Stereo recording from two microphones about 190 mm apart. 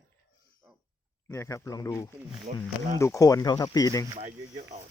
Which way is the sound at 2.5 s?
45° right (ahead or behind).